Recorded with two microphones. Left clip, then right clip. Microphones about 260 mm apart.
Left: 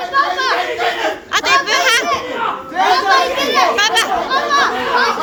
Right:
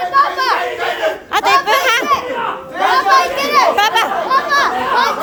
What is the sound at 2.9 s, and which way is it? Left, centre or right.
Chatter, right.